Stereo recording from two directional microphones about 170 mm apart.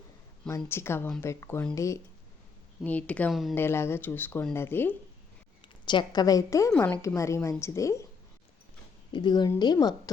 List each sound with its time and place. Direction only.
0.4 s speech: 15° left (ahead or behind)
3.5 s speech: 15° left (ahead or behind)
5.6 s speech: 30° left (ahead or behind)
9.1 s speech: 25° left (ahead or behind)